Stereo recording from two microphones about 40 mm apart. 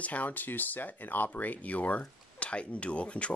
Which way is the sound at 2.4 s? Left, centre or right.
Left.